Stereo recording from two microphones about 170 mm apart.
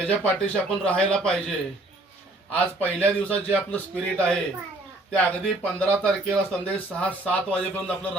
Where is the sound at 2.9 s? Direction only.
10° left (ahead or behind).